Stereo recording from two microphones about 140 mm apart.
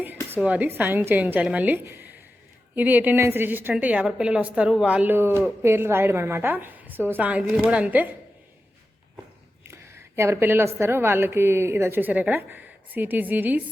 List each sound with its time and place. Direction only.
0.3 s a woman's voice: 10° right (ahead or behind)
9.6 s a woman's voice: 20° right (ahead or behind)